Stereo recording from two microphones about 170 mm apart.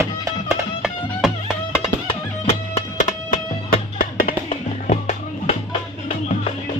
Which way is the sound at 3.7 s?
60° left (ahead or behind).